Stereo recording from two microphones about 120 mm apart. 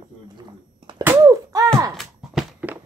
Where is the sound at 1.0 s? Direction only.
25° right (ahead or behind).